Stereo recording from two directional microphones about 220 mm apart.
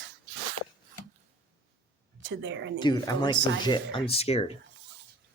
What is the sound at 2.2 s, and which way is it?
Speech, 55° right (ahead or behind).